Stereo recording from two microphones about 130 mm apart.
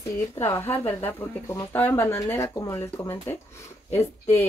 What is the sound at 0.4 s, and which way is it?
Speech, 20° left (ahead or behind).